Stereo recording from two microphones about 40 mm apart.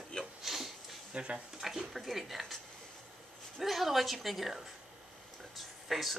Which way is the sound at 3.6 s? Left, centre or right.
Centre.